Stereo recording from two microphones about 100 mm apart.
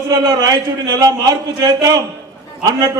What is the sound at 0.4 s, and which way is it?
A man's voice, 40° right (ahead or behind).